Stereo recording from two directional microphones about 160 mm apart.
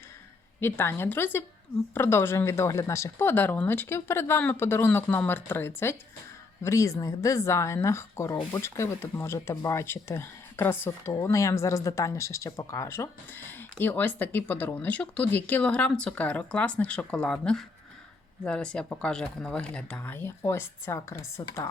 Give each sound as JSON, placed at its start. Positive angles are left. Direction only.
{"t": 0.6, "sound": "speech", "side_deg": 15}